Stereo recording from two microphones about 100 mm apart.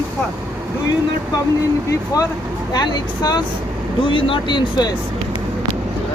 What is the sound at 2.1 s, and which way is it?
Speech, 40° left (ahead or behind).